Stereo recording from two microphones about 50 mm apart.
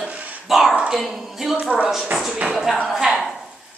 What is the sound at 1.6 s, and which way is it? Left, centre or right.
Speech, right.